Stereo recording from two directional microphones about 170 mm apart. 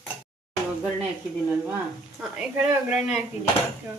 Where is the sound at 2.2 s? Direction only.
5° right (ahead or behind).